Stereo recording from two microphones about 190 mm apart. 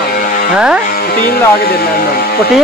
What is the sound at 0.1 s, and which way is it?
Music, 50° left (ahead or behind).